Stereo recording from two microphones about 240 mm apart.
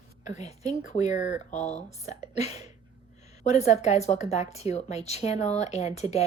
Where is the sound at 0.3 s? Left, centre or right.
Left.